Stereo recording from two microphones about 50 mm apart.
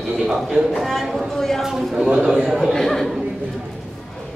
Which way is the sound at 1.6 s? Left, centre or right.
Centre.